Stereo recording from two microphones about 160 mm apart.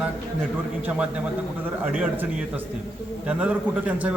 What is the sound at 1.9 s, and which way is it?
A man's voice, 10° right (ahead or behind).